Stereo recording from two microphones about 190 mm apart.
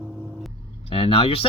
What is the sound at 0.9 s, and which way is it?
Speech, 30° left (ahead or behind).